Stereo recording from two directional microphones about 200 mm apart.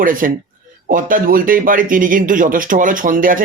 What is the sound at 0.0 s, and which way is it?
Speech, 45° right (ahead or behind).